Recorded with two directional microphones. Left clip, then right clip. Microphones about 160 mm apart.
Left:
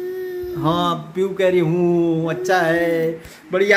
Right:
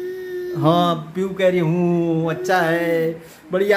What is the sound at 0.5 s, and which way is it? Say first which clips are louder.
Mantra: right 4 dB; 35° right (ahead or behind).